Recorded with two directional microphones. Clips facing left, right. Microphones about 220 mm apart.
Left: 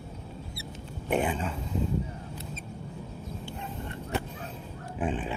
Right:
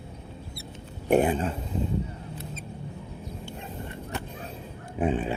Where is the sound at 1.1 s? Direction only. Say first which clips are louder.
Right 6 dB; 40° right (ahead or behind).